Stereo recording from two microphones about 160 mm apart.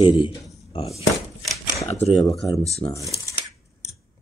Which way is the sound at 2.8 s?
35° left (ahead or behind).